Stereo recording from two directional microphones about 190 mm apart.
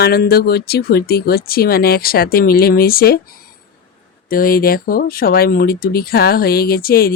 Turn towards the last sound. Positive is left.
turn(degrees=50)  # may be behind; listen again after turning